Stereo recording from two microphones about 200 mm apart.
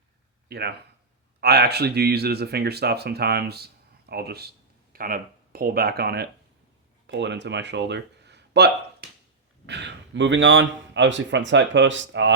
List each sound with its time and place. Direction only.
0.4 s a man's voice: 55° right (ahead or behind)